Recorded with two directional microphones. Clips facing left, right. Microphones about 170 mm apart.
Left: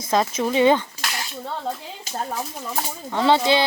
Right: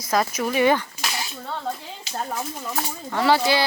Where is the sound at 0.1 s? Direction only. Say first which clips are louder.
Left 2 dB; 25° left (ahead or behind).